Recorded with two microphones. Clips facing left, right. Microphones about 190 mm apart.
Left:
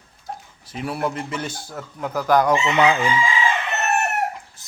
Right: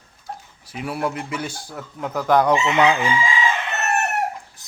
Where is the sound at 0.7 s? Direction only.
10° right (ahead or behind).